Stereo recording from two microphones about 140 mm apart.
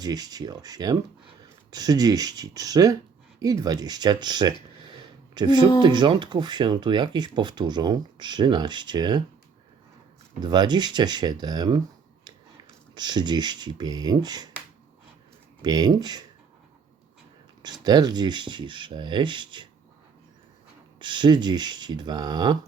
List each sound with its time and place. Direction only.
0.0 s speech: 30° right (ahead or behind)
10.4 s speech: 30° right (ahead or behind)
12.9 s speech: 30° right (ahead or behind)
15.6 s speech: 30° right (ahead or behind)
17.6 s speech: 30° right (ahead or behind)
21.0 s speech: 35° right (ahead or behind)